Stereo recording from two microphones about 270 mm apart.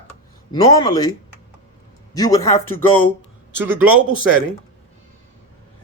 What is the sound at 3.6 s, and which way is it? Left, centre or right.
Speech, centre.